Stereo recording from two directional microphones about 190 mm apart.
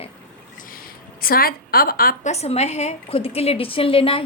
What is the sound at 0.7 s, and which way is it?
A woman's voice, 50° left (ahead or behind).